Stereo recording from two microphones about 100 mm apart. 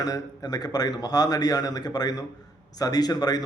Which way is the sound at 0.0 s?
40° left (ahead or behind).